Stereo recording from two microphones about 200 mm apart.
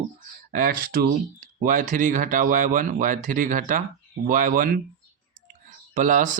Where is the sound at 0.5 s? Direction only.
45° right (ahead or behind).